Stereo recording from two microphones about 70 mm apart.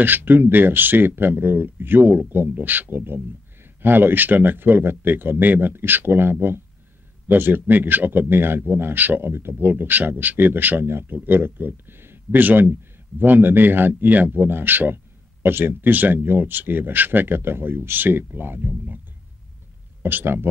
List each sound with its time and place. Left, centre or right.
0.0 s speech: right
20.0 s speech: right